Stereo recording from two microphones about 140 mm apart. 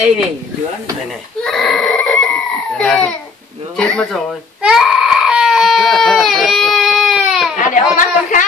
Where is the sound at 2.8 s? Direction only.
10° left (ahead or behind).